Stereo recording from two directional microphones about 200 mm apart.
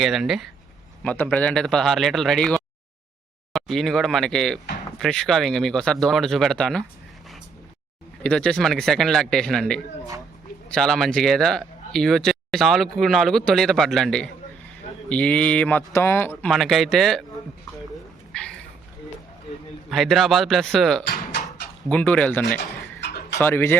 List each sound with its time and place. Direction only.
0.0 s speech: centre (ahead or behind)
8.2 s speech: 5° left (ahead or behind)
18.3 s a sound: 5° left (ahead or behind)
19.9 s speech: centre (ahead or behind)
22.5 s a sound: 55° left (ahead or behind)
23.4 s speech: 10° left (ahead or behind)